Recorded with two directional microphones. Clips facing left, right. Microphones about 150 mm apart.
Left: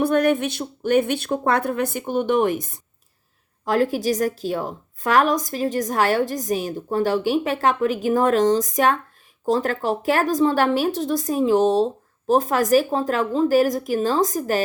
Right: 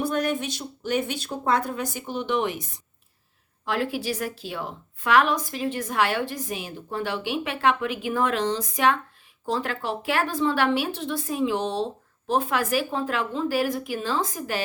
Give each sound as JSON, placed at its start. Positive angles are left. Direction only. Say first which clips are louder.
{"t": 0.0, "sound": "a woman's voice", "louder": "left 7 dB", "side_deg": 60}